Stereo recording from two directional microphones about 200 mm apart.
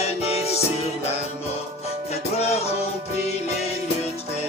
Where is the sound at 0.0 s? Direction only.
30° left (ahead or behind).